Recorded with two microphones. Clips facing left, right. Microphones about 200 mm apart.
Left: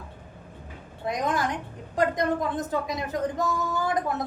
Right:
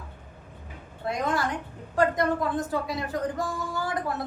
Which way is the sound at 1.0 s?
20° left (ahead or behind).